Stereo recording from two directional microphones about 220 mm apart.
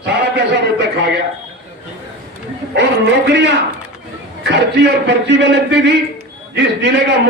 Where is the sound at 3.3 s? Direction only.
50° right (ahead or behind).